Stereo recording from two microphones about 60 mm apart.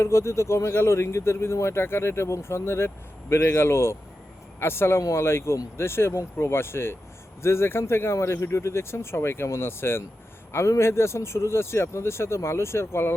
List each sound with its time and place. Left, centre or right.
0.0 s speech: left